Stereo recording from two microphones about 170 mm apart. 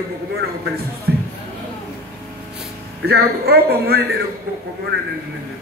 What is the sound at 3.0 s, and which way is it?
A man's voice, 70° right (ahead or behind).